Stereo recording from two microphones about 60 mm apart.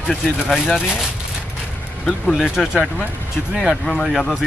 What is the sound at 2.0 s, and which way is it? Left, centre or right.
Speech, centre.